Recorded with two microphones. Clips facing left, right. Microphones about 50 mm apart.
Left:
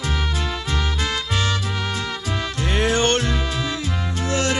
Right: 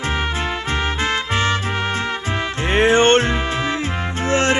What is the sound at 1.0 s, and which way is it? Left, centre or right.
Music, right.